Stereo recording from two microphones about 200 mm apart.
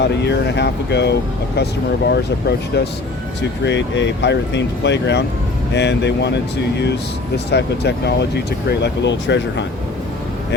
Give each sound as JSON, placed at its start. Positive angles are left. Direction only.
{"t": 0.0, "sound": "speech", "side_deg": 55}